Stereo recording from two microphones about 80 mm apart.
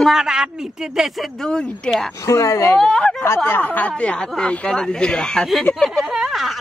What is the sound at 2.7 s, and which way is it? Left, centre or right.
Speech, centre.